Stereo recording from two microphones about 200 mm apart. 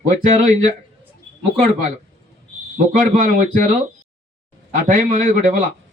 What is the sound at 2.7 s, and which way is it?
A man's voice, 40° right (ahead or behind).